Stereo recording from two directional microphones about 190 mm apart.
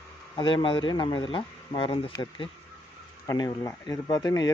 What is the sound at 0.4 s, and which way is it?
Speech, 25° left (ahead or behind).